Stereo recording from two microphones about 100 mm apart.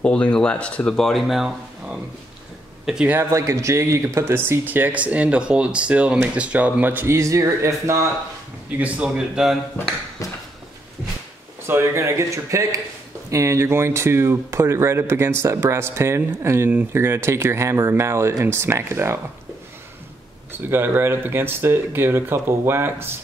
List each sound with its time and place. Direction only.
0.0 s speech: 10° left (ahead or behind); by 3.1 s 5° right (ahead or behind)
3.1 s speech: 25° right (ahead or behind)
8.6 s speech: 15° right (ahead or behind)
11.6 s speech: 25° right (ahead or behind)
20.5 s speech: 20° right (ahead or behind)